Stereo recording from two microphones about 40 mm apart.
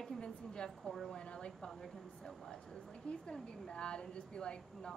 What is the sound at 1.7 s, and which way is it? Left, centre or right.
A woman's voice, centre.